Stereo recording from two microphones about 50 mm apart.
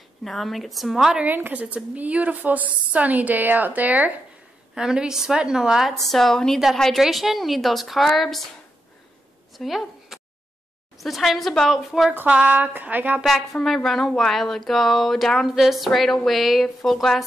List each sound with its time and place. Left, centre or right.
0.2 s speech: centre
0.9 s a woman's voice: centre
1.2 s a woman's voice: right
4.7 s a woman's voice: centre
5.9 s speech: centre
7.0 s speech: centre
9.6 s a sound: centre
11.0 s speech: centre
12.3 s a woman's voice: right
13.2 s speech: centre